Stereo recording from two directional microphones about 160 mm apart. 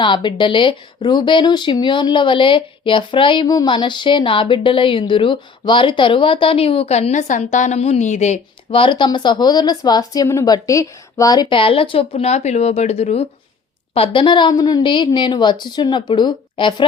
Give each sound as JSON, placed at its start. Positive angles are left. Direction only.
{"t": 0.0, "sound": "speech", "side_deg": 30}
{"t": 8.7, "sound": "speech", "side_deg": 30}